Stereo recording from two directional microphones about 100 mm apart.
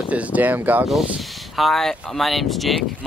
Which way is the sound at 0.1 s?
15° right (ahead or behind).